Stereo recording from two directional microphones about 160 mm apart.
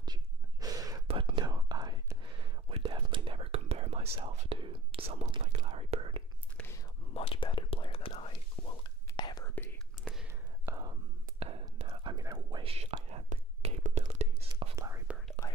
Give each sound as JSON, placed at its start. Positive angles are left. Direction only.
{"t": 0.0, "sound": "whispering", "side_deg": -25}
{"t": 1.0, "sound": "whispering", "side_deg": -35}
{"t": 6.5, "sound": "whispering", "side_deg": 10}
{"t": 7.2, "sound": "whispering", "side_deg": 35}
{"t": 10.6, "sound": "whispering", "side_deg": -20}
{"t": 12.7, "sound": "whispering", "side_deg": -40}
{"t": 14.8, "sound": "whispering", "side_deg": -20}